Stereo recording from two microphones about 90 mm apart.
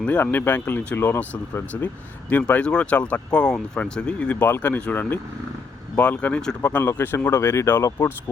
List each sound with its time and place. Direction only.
0.0 s speech: 20° left (ahead or behind)
2.3 s speech: 15° left (ahead or behind)
6.6 s speech: 20° left (ahead or behind)